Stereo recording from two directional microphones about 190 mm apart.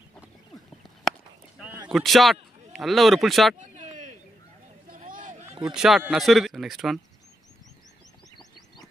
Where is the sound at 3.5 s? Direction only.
40° right (ahead or behind).